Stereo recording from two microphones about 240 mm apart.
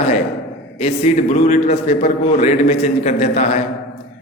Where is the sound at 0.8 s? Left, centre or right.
Left.